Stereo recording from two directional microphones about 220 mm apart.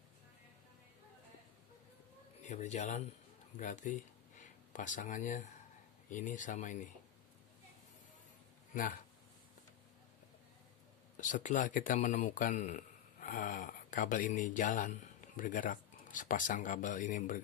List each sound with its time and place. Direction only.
2.4 s speech: 30° left (ahead or behind)
8.7 s speech: 40° left (ahead or behind)
11.1 s speech: 35° left (ahead or behind)